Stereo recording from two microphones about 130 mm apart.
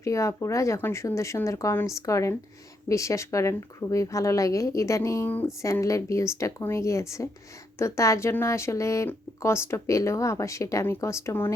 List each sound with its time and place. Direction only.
0.0 s speech: 25° left (ahead or behind)